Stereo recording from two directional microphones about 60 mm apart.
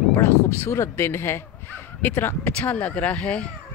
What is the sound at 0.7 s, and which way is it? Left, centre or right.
Speech, left.